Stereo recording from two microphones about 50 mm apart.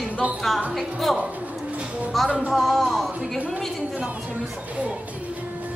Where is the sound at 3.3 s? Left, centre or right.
Right.